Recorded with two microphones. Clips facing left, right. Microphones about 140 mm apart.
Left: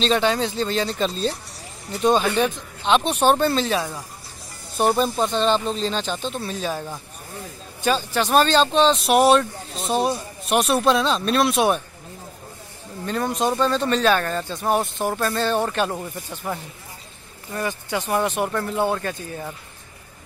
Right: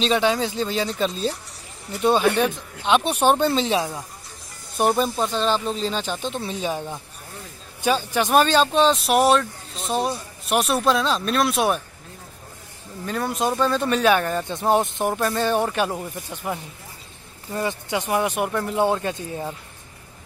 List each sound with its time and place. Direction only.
0.0 s speech: 10° right (ahead or behind)
4.7 s speech: 5° right (ahead or behind)
13.0 s speech: 5° right (ahead or behind)
17.5 s speech: 20° right (ahead or behind)